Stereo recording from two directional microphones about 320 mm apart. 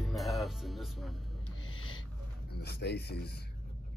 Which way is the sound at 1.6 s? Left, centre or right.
Left.